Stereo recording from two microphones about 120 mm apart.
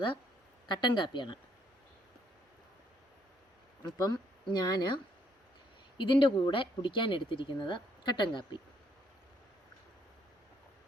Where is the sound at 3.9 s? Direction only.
30° left (ahead or behind).